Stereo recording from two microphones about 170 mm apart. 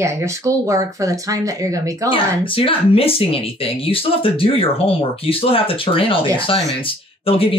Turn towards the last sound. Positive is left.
turn(degrees=35)  # may be behind; listen again after turning